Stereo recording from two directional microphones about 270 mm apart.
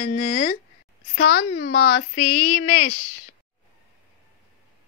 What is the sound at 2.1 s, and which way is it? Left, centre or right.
Speech, left.